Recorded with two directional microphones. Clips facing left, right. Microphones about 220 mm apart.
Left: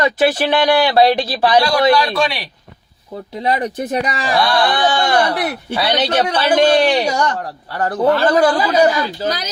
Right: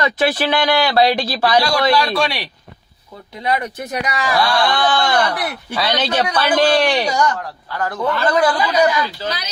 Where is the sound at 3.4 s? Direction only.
30° left (ahead or behind).